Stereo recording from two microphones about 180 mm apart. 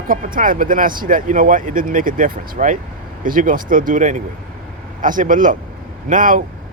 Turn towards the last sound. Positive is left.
turn(degrees=-45)  # may be behind; listen again after turning